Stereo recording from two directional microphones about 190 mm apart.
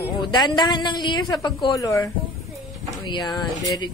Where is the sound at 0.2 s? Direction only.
25° left (ahead or behind).